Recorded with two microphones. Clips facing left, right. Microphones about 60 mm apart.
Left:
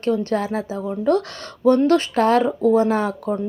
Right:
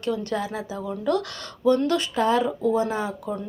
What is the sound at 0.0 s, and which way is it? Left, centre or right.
Speech, left.